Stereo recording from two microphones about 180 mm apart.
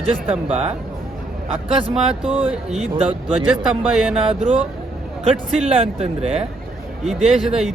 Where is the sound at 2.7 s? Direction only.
35° right (ahead or behind).